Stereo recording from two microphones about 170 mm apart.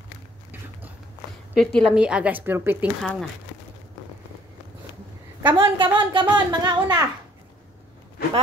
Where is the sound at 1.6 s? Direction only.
Centre (ahead or behind).